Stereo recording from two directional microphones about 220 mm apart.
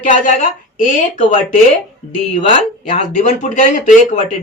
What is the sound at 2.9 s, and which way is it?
Speech, 35° left (ahead or behind).